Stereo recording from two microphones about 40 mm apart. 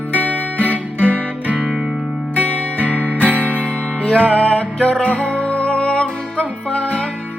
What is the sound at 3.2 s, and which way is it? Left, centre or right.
Music, right.